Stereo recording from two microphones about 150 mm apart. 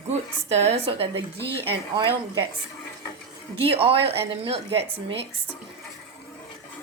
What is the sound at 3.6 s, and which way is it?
A woman's voice, 40° right (ahead or behind).